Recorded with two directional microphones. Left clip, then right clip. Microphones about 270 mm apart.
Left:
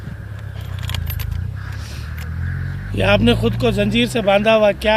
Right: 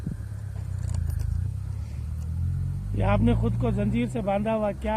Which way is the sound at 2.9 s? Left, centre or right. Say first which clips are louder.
Left 11 dB; centre.